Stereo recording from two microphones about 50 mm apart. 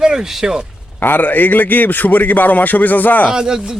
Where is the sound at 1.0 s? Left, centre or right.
Left.